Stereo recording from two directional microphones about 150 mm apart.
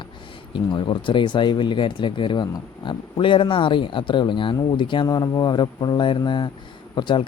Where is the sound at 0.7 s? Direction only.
30° left (ahead or behind).